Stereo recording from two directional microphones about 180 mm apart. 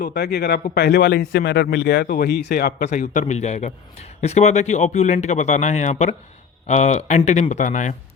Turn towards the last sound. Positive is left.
turn(degrees=40)  # may be behind; listen again after turning